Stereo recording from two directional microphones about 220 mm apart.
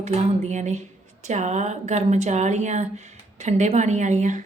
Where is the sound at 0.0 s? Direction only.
30° right (ahead or behind).